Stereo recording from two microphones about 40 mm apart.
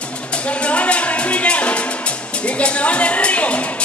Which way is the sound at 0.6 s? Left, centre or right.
Left.